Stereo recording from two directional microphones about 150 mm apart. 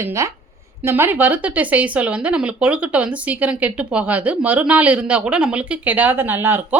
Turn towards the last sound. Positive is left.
turn(degrees=-15)  # may be behind; listen again after turning